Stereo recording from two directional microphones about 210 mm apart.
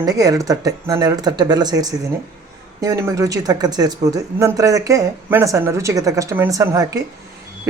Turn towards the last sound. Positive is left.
turn(degrees=-15)  # may be behind; listen again after turning